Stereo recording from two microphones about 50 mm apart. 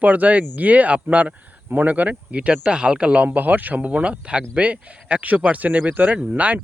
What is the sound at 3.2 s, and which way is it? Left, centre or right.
Speech, right.